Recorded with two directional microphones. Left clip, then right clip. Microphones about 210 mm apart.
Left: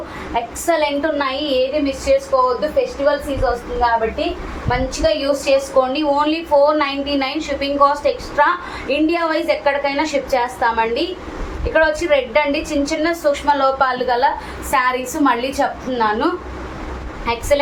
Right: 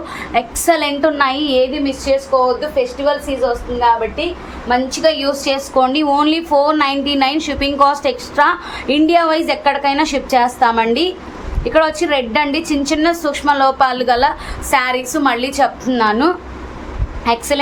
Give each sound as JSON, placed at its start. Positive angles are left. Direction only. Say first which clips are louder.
{"t": 0.3, "sound": "a woman's voice", "louder": "right 3 dB", "side_deg": -55}
{"t": 4.9, "sound": "a woman's voice", "louder": "right 2 dB", "side_deg": -55}